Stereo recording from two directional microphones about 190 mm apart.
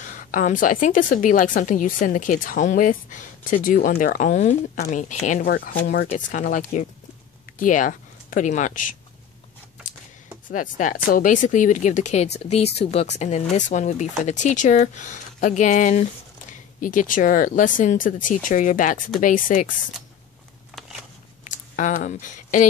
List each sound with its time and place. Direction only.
0.0 s a woman's voice: 45° left (ahead or behind)
10.5 s a woman's voice: 45° left (ahead or behind)
21.5 s speech: 40° left (ahead or behind)